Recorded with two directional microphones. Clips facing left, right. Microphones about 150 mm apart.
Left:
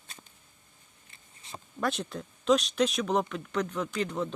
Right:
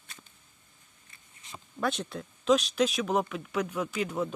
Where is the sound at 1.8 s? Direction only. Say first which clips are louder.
Even; centre (ahead or behind).